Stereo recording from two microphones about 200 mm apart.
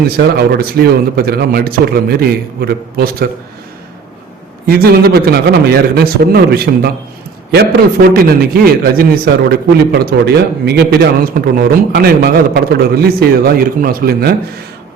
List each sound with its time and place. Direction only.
0.5 s a man's voice: 50° right (ahead or behind)
4.6 s a man's voice: 50° right (ahead or behind)